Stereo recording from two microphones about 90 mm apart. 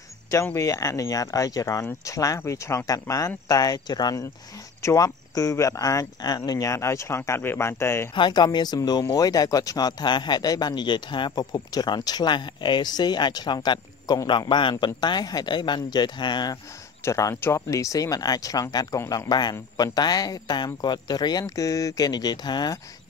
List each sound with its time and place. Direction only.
0.6 s a man's voice: 40° left (ahead or behind)
8.1 s a man's voice: 55° left (ahead or behind)
17.0 s a man's voice: 35° left (ahead or behind); by 22.8 s 50° left (ahead or behind)